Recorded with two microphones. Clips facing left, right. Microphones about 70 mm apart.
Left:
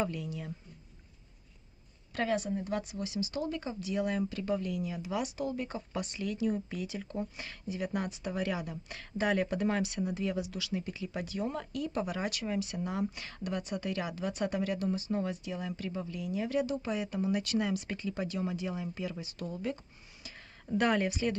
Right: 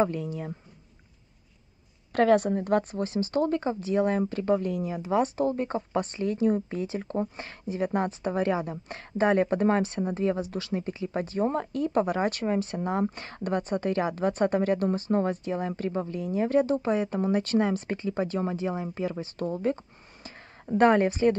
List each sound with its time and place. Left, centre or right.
0.0 s a woman's voice: right
2.1 s a woman's voice: right